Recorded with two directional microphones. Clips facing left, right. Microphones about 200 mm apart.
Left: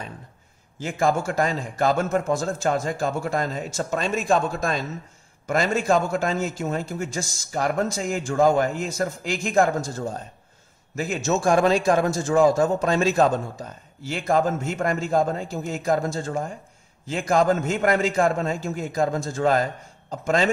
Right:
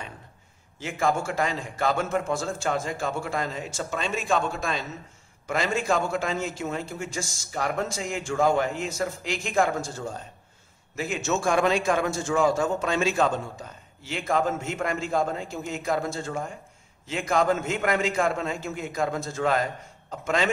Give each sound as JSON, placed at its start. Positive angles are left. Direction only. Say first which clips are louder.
{"t": 0.7, "sound": "a man's voice", "louder": "left 3 dB", "side_deg": 40}